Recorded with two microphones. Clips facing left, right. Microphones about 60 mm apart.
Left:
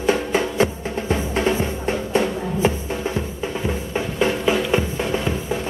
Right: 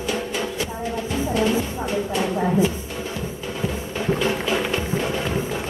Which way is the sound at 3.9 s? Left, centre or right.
Left.